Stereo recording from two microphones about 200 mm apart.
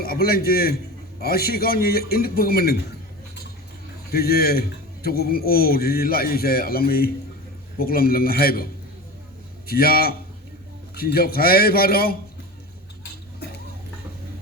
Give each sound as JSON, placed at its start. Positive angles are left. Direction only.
{"t": 0.0, "sound": "a man's voice", "side_deg": 50}
{"t": 4.1, "sound": "a man's voice", "side_deg": 50}
{"t": 9.6, "sound": "a man's voice", "side_deg": 50}